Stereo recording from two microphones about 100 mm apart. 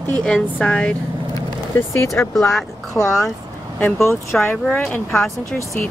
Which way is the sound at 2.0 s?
30° left (ahead or behind).